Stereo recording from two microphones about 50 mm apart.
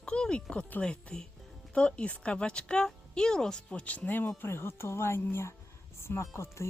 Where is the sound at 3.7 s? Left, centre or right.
Left.